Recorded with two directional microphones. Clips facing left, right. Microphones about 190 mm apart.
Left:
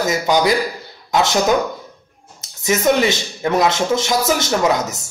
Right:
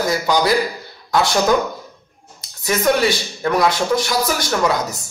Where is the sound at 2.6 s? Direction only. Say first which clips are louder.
Left 1 dB; 20° left (ahead or behind).